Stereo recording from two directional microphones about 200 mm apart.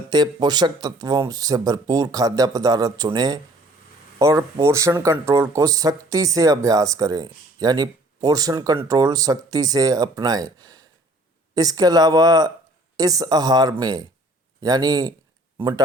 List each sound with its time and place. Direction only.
0.1 s speech: 20° right (ahead or behind)